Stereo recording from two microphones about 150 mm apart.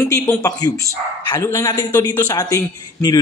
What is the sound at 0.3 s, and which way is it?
A woman's voice, 20° left (ahead or behind).